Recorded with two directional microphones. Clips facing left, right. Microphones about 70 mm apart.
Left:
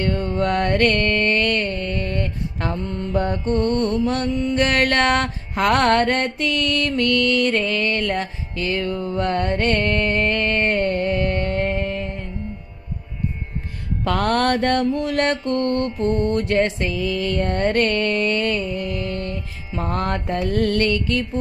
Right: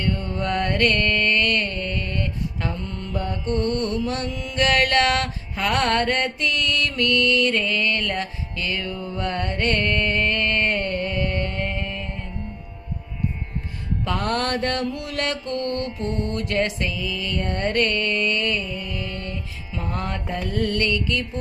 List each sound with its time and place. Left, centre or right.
0.1 s mantra: left
2.6 s mantra: left
3.4 s music: left
5.5 s mantra: left
8.1 s music: left
14.0 s mantra: left
16.9 s mantra: left
19.2 s music: left